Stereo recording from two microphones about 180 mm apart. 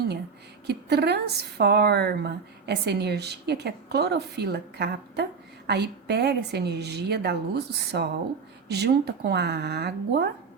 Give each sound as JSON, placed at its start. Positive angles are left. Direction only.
{"t": 0.7, "sound": "a woman's voice", "side_deg": -65}